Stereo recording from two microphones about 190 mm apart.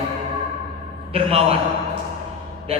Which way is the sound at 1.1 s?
30° right (ahead or behind).